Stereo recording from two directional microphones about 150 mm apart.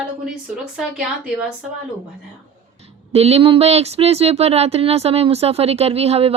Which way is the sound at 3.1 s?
45° right (ahead or behind).